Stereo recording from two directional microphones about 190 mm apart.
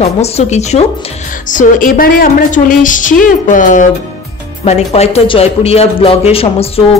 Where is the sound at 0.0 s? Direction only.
35° left (ahead or behind).